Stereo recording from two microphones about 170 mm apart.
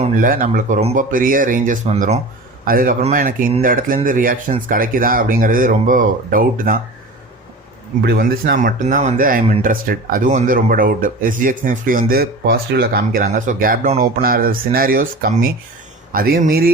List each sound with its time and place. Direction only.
0.2 s speech: 55° right (ahead or behind)
0.9 s speech: 55° right (ahead or behind)
2.6 s speech: 55° right (ahead or behind)
8.0 s speech: 70° right (ahead or behind)